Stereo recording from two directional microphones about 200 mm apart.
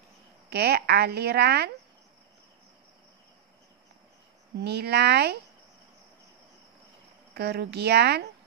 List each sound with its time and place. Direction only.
0.5 s a woman's voice: 55° right (ahead or behind)
4.6 s a woman's voice: 55° right (ahead or behind)
7.3 s speech: 55° right (ahead or behind)